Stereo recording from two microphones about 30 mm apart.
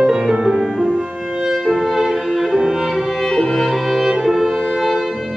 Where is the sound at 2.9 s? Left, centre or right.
Centre.